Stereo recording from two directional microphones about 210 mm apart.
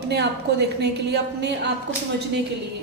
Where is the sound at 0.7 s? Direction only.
55° right (ahead or behind).